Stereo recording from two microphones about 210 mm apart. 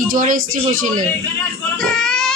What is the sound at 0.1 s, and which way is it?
Speech, 40° right (ahead or behind).